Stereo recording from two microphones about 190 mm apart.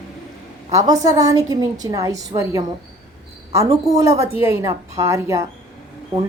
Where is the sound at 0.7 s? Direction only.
20° right (ahead or behind).